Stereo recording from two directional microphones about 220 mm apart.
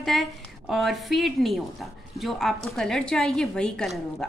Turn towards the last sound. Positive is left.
turn(degrees=0)  # may be behind; listen again after turning